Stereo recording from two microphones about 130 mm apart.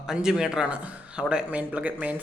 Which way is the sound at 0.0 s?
5° right (ahead or behind).